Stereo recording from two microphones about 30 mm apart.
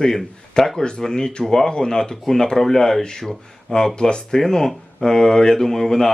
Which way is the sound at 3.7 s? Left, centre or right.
Left.